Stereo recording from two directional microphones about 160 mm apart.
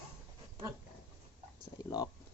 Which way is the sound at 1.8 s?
25° left (ahead or behind).